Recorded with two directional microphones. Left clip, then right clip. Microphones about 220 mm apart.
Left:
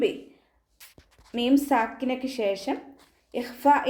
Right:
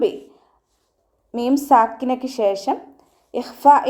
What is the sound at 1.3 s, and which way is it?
A woman's voice, 15° right (ahead or behind).